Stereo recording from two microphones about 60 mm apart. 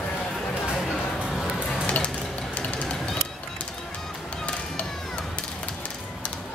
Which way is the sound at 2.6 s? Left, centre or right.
Left.